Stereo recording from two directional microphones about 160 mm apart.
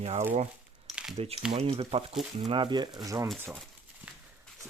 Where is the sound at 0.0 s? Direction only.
40° right (ahead or behind).